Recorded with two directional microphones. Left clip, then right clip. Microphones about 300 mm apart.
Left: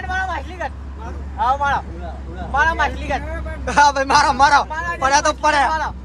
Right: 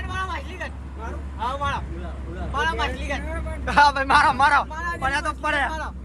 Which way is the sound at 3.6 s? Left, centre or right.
Centre.